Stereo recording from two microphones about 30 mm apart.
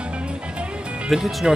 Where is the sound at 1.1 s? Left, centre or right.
Centre.